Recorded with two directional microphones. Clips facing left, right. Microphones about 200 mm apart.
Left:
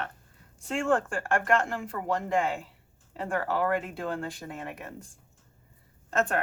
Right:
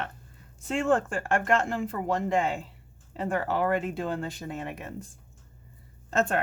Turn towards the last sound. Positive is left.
turn(degrees=-25)  # may be behind; listen again after turning